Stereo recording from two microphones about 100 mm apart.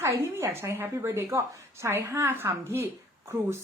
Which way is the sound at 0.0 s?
25° right (ahead or behind).